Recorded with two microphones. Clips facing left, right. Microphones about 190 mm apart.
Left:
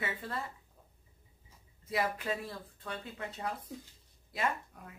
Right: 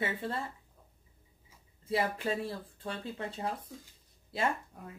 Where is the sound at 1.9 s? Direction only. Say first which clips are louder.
Right 2 dB; 30° right (ahead or behind).